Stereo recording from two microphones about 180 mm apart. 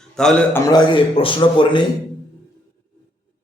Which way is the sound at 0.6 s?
25° left (ahead or behind).